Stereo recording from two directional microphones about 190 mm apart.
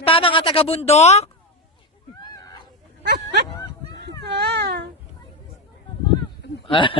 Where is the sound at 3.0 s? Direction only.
60° right (ahead or behind).